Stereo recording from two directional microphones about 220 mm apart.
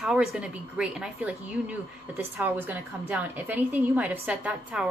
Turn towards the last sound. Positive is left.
turn(degrees=-5)  # may be behind; listen again after turning